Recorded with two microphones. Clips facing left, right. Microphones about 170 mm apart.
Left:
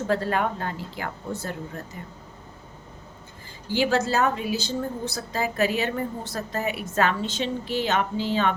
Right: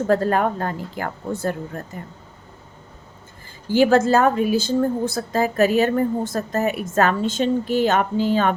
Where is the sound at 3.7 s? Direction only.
50° right (ahead or behind).